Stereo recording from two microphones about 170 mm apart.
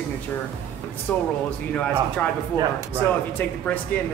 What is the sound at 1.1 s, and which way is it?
Speech, 10° left (ahead or behind).